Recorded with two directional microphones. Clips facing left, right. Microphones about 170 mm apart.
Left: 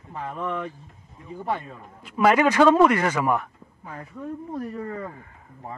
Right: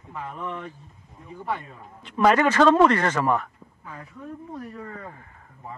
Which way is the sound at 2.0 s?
5° left (ahead or behind).